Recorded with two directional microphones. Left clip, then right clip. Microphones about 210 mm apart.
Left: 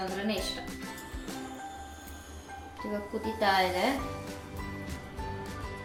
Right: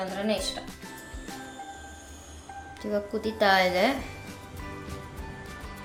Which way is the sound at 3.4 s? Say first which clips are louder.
Right 5 dB; 55° right (ahead or behind).